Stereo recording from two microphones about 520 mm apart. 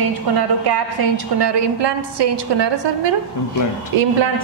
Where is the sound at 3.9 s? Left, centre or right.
Right.